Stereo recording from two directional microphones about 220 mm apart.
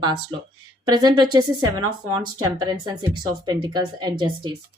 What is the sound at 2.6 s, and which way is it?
A woman's voice, 20° right (ahead or behind).